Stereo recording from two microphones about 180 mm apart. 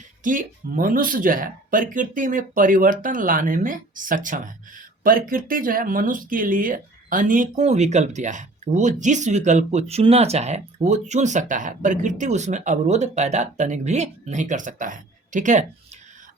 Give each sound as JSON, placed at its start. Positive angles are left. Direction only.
{"t": 0.2, "sound": "speech", "side_deg": -50}